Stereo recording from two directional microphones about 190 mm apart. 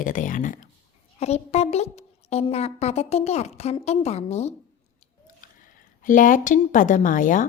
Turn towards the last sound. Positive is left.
turn(degrees=45)  # may be behind; listen again after turning